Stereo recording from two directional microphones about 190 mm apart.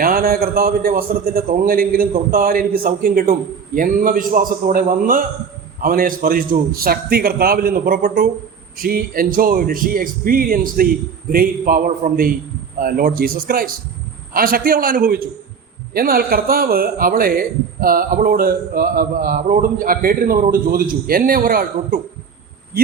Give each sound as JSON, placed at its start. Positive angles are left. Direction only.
{"t": 0.0, "sound": "speech", "side_deg": -50}